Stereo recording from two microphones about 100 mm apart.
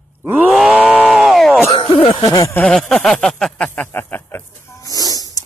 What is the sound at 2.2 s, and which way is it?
Speech, 35° left (ahead or behind).